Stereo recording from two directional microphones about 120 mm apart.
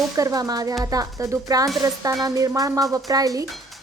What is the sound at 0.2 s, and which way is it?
Speech, 30° right (ahead or behind).